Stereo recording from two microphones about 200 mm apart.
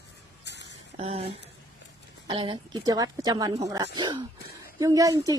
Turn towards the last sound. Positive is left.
turn(degrees=-15)  # may be behind; listen again after turning